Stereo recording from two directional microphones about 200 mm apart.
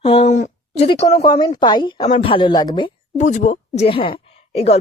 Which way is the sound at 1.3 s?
20° left (ahead or behind).